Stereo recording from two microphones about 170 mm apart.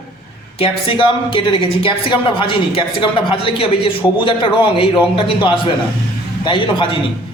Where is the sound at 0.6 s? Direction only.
30° left (ahead or behind).